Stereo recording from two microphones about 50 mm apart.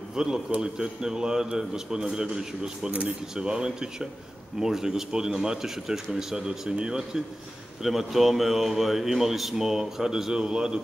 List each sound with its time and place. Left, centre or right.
0.1 s a man's voice: centre